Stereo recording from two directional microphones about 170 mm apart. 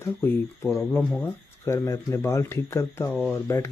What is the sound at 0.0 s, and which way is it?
Speech, 15° left (ahead or behind).